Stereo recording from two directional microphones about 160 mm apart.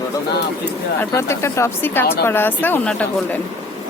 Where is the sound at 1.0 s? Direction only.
15° left (ahead or behind).